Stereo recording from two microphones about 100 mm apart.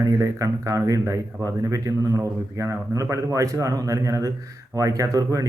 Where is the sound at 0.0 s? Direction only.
35° right (ahead or behind).